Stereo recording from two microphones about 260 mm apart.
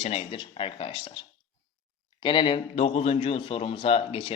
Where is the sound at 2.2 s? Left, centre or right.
Centre.